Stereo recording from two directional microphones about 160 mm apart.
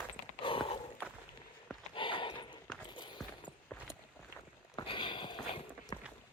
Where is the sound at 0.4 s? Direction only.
35° left (ahead or behind).